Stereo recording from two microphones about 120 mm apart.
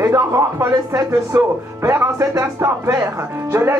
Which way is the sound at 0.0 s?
25° right (ahead or behind).